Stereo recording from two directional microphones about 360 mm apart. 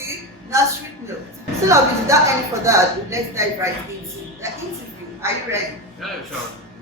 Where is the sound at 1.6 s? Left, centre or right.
Centre.